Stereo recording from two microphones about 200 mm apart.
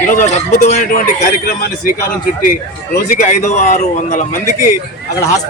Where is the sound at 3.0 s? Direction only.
40° left (ahead or behind).